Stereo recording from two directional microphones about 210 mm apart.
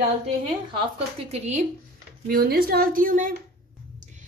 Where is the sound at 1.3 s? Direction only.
30° right (ahead or behind).